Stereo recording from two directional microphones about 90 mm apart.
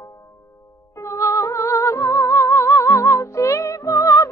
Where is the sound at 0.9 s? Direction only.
35° left (ahead or behind).